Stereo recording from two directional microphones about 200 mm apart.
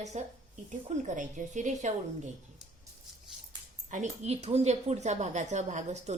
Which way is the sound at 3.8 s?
35° right (ahead or behind).